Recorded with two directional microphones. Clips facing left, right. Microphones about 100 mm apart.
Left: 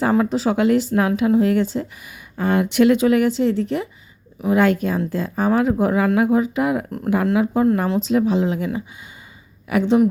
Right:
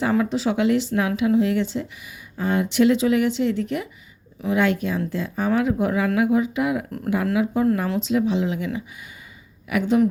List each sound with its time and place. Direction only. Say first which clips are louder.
0.0 s speech: left 3 dB; 40° left (ahead or behind)
2.4 s speech: left 3 dB; 55° left (ahead or behind); by 3.8 s 30° left (ahead or behind)
4.4 s speech: left 4 dB; 45° left (ahead or behind)